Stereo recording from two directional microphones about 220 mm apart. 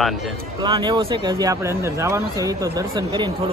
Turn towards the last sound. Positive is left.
turn(degrees=-15)  # may be behind; listen again after turning